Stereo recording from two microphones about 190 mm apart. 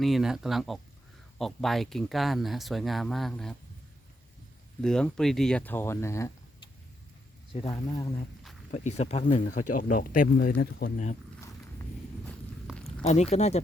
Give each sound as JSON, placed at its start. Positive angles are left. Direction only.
{"t": 0.0, "sound": "speech", "side_deg": 0}
{"t": 4.8, "sound": "speech", "side_deg": 5}
{"t": 7.7, "sound": "speech", "side_deg": 20}
{"t": 8.7, "sound": "speech", "side_deg": 35}
{"t": 10.9, "sound": "speech", "side_deg": 40}
{"t": 12.6, "sound": "a sound", "side_deg": 0}
{"t": 13.0, "sound": "speech", "side_deg": 35}